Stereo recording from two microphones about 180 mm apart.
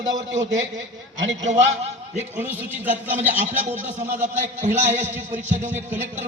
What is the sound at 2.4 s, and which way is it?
Speech, 10° right (ahead or behind).